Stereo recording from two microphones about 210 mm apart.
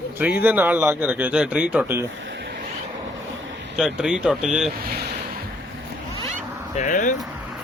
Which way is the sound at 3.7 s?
5° right (ahead or behind).